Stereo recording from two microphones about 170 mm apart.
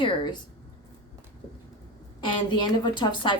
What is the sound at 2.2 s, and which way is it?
Speech, 25° left (ahead or behind).